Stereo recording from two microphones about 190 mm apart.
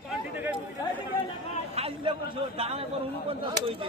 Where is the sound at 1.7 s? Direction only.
30° right (ahead or behind).